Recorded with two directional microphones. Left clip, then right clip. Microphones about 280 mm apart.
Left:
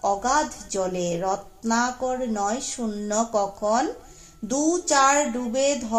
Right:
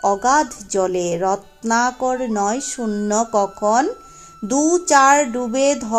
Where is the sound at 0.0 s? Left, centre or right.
Right.